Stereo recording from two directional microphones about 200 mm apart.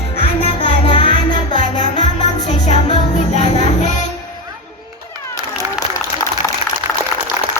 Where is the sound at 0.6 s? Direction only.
25° left (ahead or behind).